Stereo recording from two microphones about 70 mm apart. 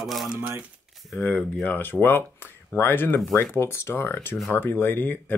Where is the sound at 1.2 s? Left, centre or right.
Centre.